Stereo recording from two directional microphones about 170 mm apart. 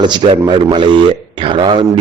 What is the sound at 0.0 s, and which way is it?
A man's voice, 25° right (ahead or behind).